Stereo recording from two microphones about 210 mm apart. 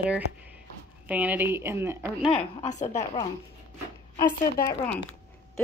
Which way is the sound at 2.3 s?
30° left (ahead or behind).